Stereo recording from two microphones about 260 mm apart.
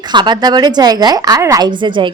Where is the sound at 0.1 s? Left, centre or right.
Centre.